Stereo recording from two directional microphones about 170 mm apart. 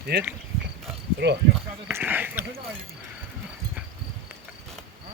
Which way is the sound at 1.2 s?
90° right.